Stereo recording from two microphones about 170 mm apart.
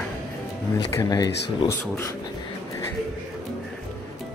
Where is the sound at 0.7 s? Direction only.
20° left (ahead or behind).